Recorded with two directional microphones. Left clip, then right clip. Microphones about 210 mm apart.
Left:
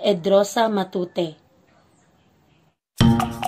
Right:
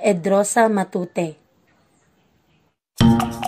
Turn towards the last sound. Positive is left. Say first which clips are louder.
# right 2 dB
turn(degrees=0)  # may be behind; listen again after turning